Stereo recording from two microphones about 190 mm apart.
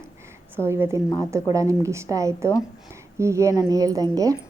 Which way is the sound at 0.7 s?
15° right (ahead or behind).